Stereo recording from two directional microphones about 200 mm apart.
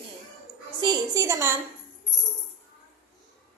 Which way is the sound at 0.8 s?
20° right (ahead or behind).